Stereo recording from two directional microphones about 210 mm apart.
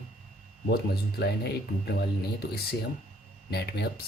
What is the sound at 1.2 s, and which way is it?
Speech, 50° left (ahead or behind).